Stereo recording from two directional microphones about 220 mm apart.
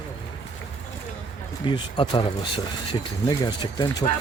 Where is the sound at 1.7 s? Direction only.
20° left (ahead or behind).